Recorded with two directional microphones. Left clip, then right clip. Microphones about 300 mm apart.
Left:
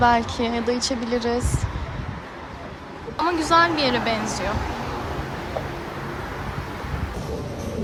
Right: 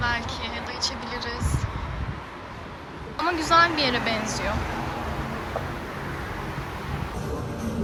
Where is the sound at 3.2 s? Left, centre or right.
Centre.